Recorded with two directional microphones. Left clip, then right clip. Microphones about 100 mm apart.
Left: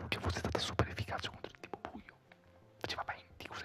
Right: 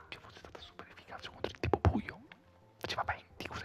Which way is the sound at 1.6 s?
30° right (ahead or behind).